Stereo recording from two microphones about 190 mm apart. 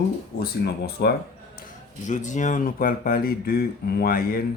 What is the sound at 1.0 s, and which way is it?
Speech, 55° left (ahead or behind).